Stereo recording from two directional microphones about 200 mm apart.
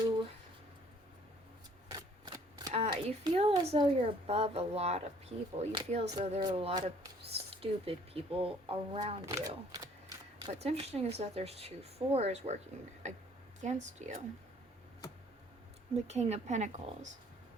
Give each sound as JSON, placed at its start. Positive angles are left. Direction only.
{"t": 1.9, "sound": "a sound", "side_deg": -20}
{"t": 2.8, "sound": "a sound", "side_deg": -30}
{"t": 3.2, "sound": "speech", "side_deg": -25}
{"t": 9.2, "sound": "speech", "side_deg": -15}
{"t": 10.4, "sound": "speech", "side_deg": -30}
{"t": 16.0, "sound": "speech", "side_deg": -35}